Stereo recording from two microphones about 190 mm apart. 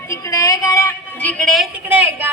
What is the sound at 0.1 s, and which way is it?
Speech, 15° left (ahead or behind).